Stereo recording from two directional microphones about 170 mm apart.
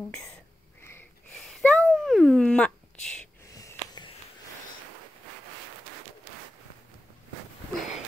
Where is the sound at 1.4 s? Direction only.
Centre (ahead or behind).